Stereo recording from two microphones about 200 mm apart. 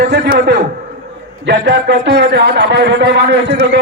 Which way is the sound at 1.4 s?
60° right (ahead or behind).